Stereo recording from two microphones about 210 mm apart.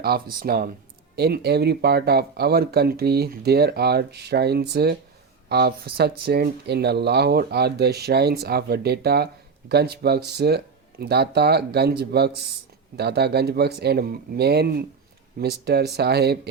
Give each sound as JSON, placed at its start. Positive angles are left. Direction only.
{"t": 0.3, "sound": "speech", "side_deg": -45}